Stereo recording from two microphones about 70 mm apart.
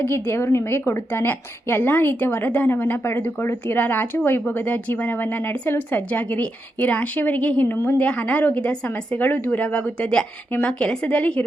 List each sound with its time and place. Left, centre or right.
0.0 s a woman's voice: left; by 11.4 s centre